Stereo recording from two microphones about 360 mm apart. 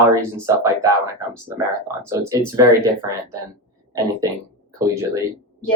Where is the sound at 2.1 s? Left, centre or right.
Centre.